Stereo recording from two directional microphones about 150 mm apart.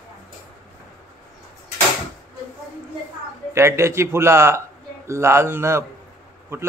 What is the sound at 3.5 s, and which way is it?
A man's voice, 15° right (ahead or behind).